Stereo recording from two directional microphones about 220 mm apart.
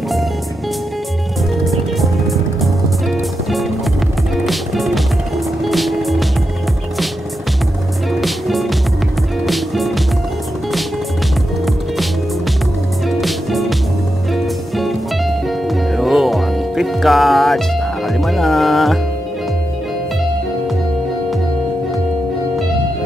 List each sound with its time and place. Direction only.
1.6 s music: centre (ahead or behind)
8.1 s music: centre (ahead or behind)
13.2 s music: centre (ahead or behind)